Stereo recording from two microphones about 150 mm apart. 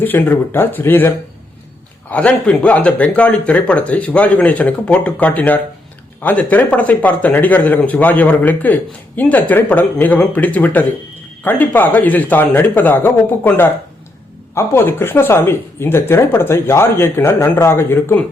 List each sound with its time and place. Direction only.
0.0 s speech: 10° left (ahead or behind)